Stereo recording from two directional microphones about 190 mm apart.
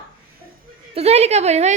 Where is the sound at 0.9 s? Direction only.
35° right (ahead or behind).